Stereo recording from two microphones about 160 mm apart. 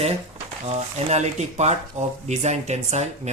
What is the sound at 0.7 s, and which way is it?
Speech, 45° right (ahead or behind).